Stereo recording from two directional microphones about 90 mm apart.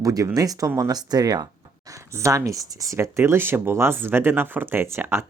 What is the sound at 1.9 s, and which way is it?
Speech, 35° right (ahead or behind).